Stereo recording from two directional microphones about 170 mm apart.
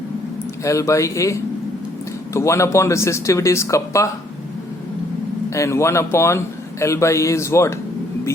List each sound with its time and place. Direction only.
0.6 s speech: 20° left (ahead or behind)
5.5 s speech: 15° left (ahead or behind)